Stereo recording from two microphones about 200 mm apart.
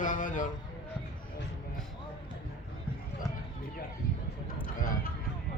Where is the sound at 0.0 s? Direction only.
40° left (ahead or behind).